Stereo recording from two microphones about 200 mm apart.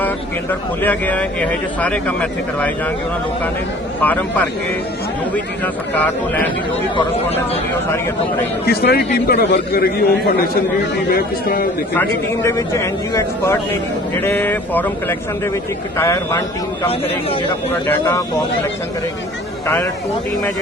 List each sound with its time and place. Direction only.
0.8 s a man's voice: 10° left (ahead or behind)
4.0 s a man's voice: 10° left (ahead or behind)
5.6 s a man's voice: 10° left (ahead or behind)
8.6 s a man's voice: 50° left (ahead or behind)
11.9 s a man's voice: 15° left (ahead or behind)
16.0 s a man's voice: 15° left (ahead or behind)
17.8 s a man's voice: 10° left (ahead or behind)
19.6 s a man's voice: 10° left (ahead or behind)